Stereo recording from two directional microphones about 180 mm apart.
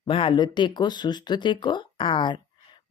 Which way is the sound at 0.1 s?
30° left (ahead or behind).